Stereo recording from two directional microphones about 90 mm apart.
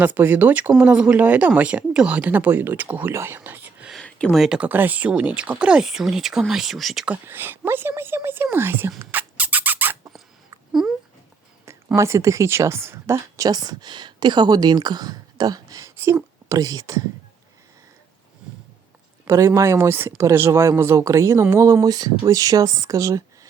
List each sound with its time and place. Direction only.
0.0 s speech: 20° right (ahead or behind)
4.0 s a sound: 10° left (ahead or behind)
4.4 s speech: 10° right (ahead or behind)
4.7 s speech: 20° right (ahead or behind); by 7.1 s centre (ahead or behind)
7.1 s speech: 25° right (ahead or behind)
9.0 s a sound: 20° right (ahead or behind)
10.7 s dog: centre (ahead or behind)
11.9 s speech: 35° right (ahead or behind)
19.3 s speech: 35° right (ahead or behind)